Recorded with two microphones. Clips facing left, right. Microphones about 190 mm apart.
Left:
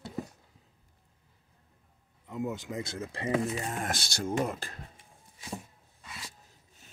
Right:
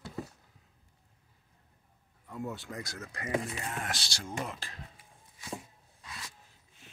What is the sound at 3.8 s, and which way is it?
Speech, 50° left (ahead or behind).